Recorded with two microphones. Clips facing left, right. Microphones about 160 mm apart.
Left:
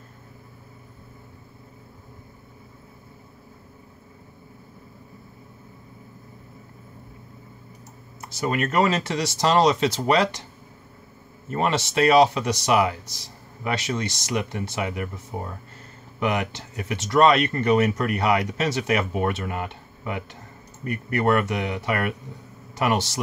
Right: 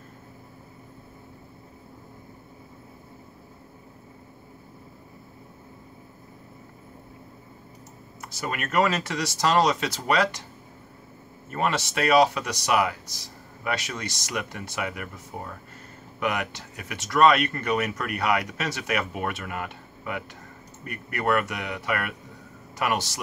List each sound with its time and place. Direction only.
8.2 s speech: 25° left (ahead or behind)
11.5 s speech: 25° left (ahead or behind)